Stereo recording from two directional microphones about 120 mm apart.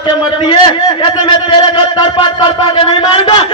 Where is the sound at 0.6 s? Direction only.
40° left (ahead or behind).